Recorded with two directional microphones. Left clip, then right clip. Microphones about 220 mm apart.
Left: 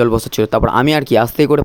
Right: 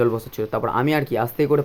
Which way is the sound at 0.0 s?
45° left (ahead or behind).